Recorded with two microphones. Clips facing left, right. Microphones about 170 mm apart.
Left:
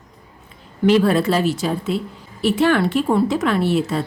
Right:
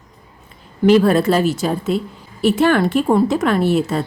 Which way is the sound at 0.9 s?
45° right (ahead or behind).